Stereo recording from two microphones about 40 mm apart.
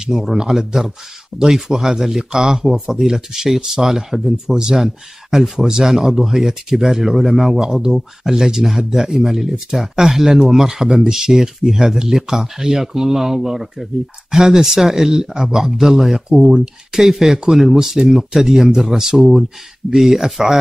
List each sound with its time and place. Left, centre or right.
0.0 s speech: centre
17.0 s speech: centre